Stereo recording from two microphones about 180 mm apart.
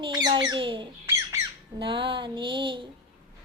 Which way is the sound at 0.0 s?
25° right (ahead or behind).